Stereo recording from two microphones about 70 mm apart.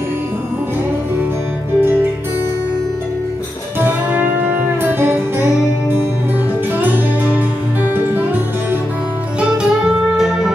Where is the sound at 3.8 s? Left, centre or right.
Right.